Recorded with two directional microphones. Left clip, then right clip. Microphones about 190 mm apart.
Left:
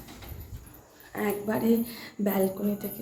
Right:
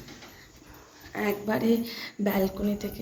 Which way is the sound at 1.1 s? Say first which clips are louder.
Right 1 dB; centre (ahead or behind).